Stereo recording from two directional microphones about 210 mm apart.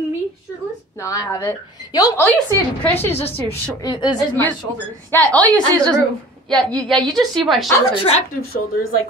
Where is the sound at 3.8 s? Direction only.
20° left (ahead or behind).